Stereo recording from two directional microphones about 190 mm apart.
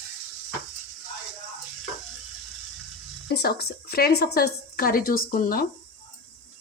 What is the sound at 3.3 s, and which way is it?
A woman's voice, 55° left (ahead or behind).